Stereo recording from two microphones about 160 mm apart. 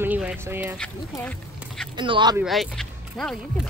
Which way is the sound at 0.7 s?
10° left (ahead or behind).